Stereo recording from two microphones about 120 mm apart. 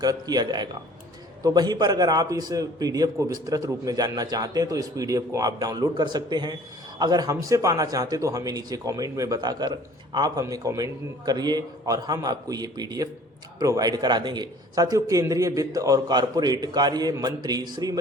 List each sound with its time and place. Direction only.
0.0 s a man's voice: 35° right (ahead or behind)